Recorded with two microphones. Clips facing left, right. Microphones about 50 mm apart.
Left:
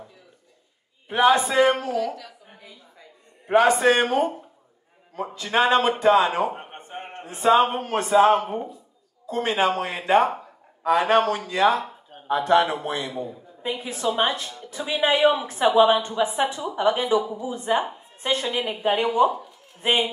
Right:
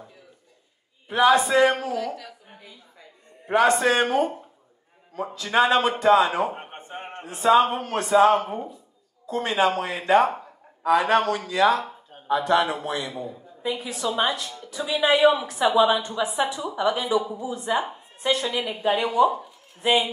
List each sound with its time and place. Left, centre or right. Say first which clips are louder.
1.1 s a woman's voice: even; left
1.8 s a woman's voice: left 2 dB; centre
3.4 s a man's voice: left 2 dB; centre
5.2 s a woman's voice: right 1 dB; centre
6.9 s a sound: even; centre
7.5 s a woman's voice: right 1 dB; left
8.4 s a man's voice: left 1 dB; centre
10.3 s a sound: left 1 dB; centre
11.1 s a man's voice: left 2 dB; centre
11.5 s a woman's voice: even; left